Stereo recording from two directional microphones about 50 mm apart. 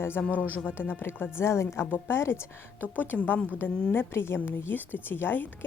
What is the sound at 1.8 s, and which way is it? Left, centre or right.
Speech, left.